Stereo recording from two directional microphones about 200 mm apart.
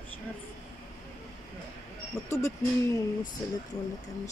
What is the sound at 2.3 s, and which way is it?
Speech, 15° left (ahead or behind).